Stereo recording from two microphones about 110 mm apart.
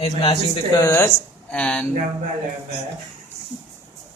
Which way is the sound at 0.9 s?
20° left (ahead or behind).